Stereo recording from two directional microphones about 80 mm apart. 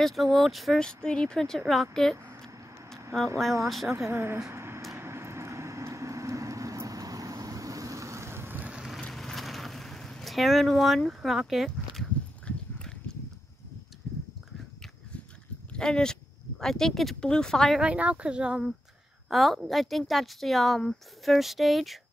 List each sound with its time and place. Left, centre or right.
0.0 s speech: centre
0.7 s speech: centre
3.6 s speech: centre
3.9 s speech: right
4.4 s vehicle: right
8.5 s boat: centre
9.1 s vehicle: centre
12.4 s clip-clop: centre
15.7 s speech: centre
17.7 s speech: centre
19.2 s speech: centre